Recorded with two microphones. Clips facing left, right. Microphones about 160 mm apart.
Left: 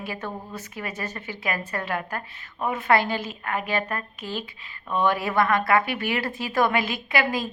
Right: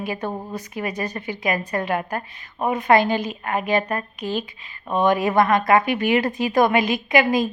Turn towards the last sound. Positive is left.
turn(degrees=-15)  # may be behind; listen again after turning